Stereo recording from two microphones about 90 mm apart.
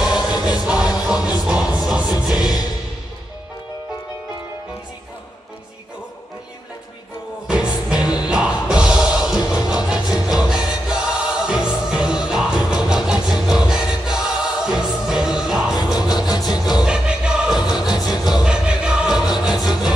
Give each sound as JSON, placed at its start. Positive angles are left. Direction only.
{"t": 0.0, "sound": "music", "side_deg": -5}
{"t": 7.4, "sound": "music", "side_deg": -10}
{"t": 16.0, "sound": "music", "side_deg": 50}
{"t": 16.8, "sound": "music", "side_deg": -10}
{"t": 19.4, "sound": "a sound", "side_deg": -5}